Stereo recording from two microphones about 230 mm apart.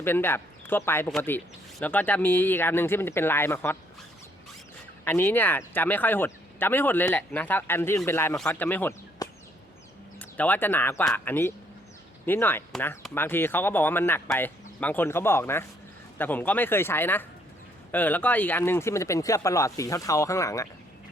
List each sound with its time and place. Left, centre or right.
0.0 s speech: centre
5.0 s speech: centre